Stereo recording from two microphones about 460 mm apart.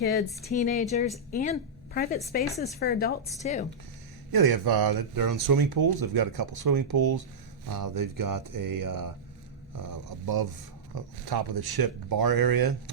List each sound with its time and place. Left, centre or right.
0.0 s a woman's voice: centre
4.3 s speech: right